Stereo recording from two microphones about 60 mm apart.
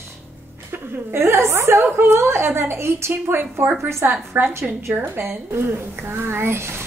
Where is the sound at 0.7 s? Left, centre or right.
Right.